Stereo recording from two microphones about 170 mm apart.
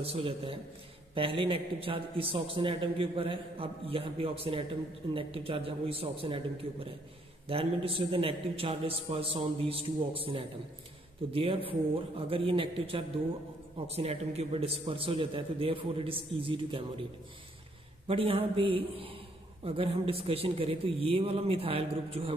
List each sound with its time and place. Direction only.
0.0 s a man's voice: 35° right (ahead or behind)
18.0 s a man's voice: 35° right (ahead or behind)